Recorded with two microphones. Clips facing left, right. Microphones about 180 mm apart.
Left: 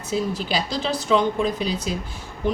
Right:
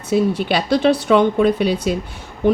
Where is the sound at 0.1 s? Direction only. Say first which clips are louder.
Right 7 dB; 65° right (ahead or behind).